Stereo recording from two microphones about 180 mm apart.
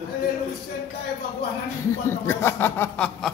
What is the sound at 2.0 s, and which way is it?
Speech, 15° left (ahead or behind).